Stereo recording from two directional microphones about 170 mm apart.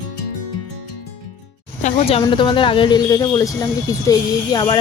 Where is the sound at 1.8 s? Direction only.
40° left (ahead or behind).